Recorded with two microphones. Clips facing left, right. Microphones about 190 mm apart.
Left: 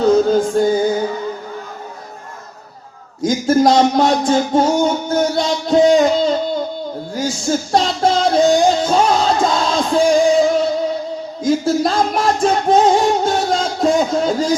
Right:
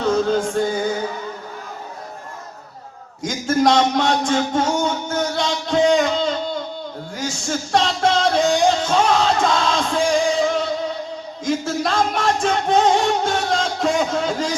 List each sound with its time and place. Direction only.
0.0 s music: 35° left (ahead or behind)
3.2 s speech: 35° left (ahead or behind)
7.1 s music: 35° left (ahead or behind)